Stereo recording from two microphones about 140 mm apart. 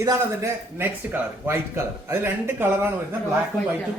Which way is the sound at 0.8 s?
15° right (ahead or behind).